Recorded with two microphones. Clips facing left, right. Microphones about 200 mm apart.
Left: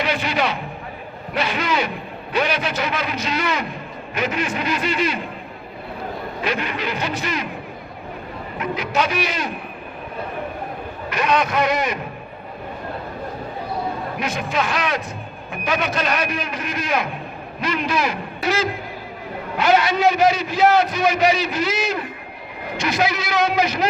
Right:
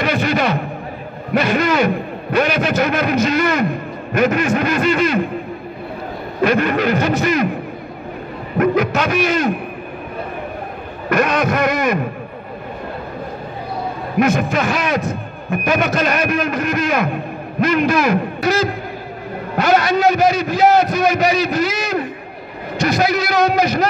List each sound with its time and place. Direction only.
0.0 s a sound: 45° right (ahead or behind)
1.3 s a man's voice: 45° right (ahead or behind)
6.4 s a man's voice: 50° right (ahead or behind)
8.5 s a man's voice: 50° right (ahead or behind)
11.1 s a man's voice: 45° right (ahead or behind)
14.2 s a man's voice: 45° right (ahead or behind)